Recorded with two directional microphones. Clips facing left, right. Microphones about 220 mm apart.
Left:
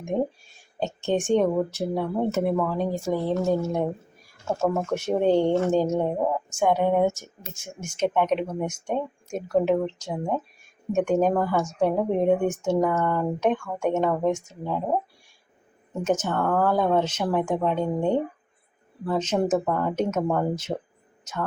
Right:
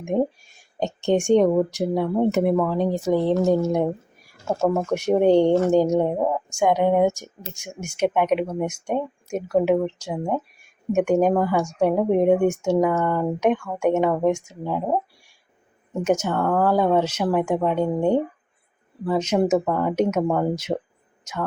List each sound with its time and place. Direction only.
0.1 s a woman's voice: 10° right (ahead or behind)
16.0 s a woman's voice: 10° right (ahead or behind)